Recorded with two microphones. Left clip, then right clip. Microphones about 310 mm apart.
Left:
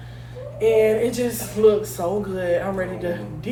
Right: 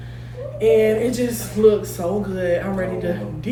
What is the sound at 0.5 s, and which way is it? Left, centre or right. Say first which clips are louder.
Speech: right 1 dB; centre.